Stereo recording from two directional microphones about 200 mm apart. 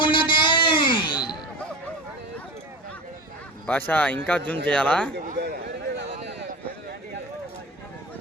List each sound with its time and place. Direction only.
0.0 s music: 25° left (ahead or behind)
3.7 s speech: 10° left (ahead or behind)
5.1 s a sound: 55° right (ahead or behind)